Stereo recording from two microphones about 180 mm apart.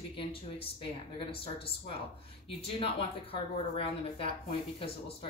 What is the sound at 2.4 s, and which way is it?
A woman's voice, 30° left (ahead or behind).